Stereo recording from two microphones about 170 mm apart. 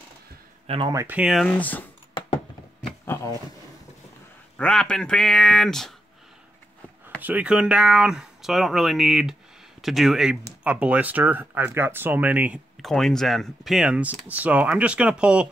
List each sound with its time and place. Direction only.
0.7 s speech: 30° right (ahead or behind)
0.9 s speech: 10° right (ahead or behind); by 1.9 s 10° left (ahead or behind)
3.1 s a sound: 15° left (ahead or behind)
4.6 s speech: 5° left (ahead or behind)
7.2 s speech: 10° right (ahead or behind)
12.8 s speech: centre (ahead or behind)